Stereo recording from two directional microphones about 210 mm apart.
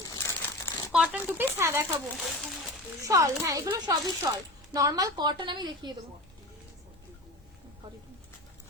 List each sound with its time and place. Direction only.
0.0 s crumpling: 15° left (ahead or behind)
0.9 s speech: 5° right (ahead or behind)
2.1 s speech: centre (ahead or behind)
3.0 s a woman's voice: 15° right (ahead or behind)